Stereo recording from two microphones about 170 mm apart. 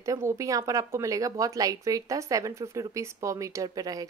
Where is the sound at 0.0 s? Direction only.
20° right (ahead or behind).